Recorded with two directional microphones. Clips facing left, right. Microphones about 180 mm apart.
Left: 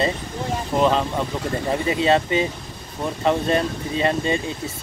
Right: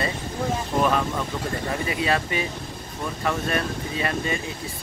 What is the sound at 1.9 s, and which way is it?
Speech, 25° left (ahead or behind).